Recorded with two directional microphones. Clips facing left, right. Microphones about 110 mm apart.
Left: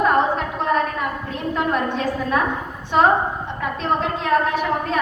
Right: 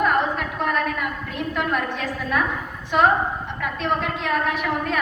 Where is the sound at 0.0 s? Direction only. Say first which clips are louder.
Left 3 dB; 30° left (ahead or behind).